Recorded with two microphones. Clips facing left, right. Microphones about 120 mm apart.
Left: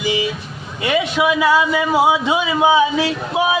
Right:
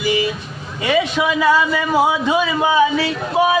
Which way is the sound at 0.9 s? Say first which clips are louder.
Even; 5° left (ahead or behind).